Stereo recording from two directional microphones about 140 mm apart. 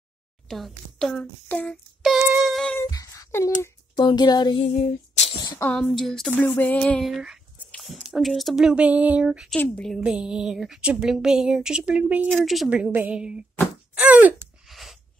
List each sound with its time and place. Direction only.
0.5 s a woman's voice: centre (ahead or behind)
1.2 s music: 10° left (ahead or behind)
2.0 s a sound: 5° right (ahead or behind)
2.4 s humming: 5° left (ahead or behind)
2.8 s a sound: 25° left (ahead or behind)
3.9 s speech: 30° left (ahead or behind)
5.6 s a woman's voice: 5° left (ahead or behind)
6.5 s music: 15° left (ahead or behind)
7.7 s a woman's voice: centre (ahead or behind)
9.6 s a woman's voice: 5° left (ahead or behind)
13.9 s gasp: 10° right (ahead or behind)